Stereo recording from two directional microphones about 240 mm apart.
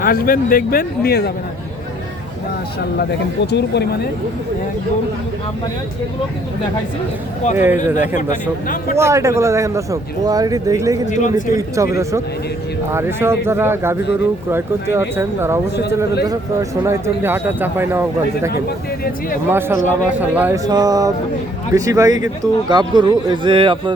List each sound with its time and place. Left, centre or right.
0.0 s speech: left
3.0 s speech: left
7.5 s a man's voice: centre
8.1 s speech: left
9.0 s a man's voice: centre
11.0 s speech: left
11.5 s a man's voice: centre
12.9 s a man's voice: centre
19.5 s a man's voice: centre